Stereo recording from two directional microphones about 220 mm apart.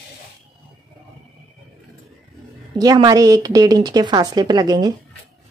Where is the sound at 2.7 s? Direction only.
15° right (ahead or behind).